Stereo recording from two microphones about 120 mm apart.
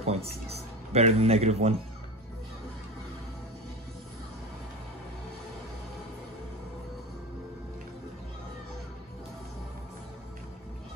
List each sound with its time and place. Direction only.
0.0 s speech: 60° right (ahead or behind)